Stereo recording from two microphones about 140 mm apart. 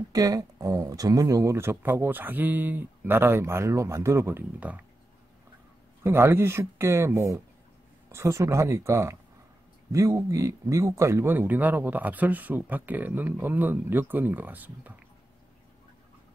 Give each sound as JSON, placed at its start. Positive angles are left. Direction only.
{"t": 0.1, "sound": "speech", "side_deg": -25}
{"t": 6.0, "sound": "speech", "side_deg": -20}